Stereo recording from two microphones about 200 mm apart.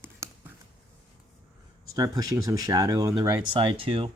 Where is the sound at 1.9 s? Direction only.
20° right (ahead or behind).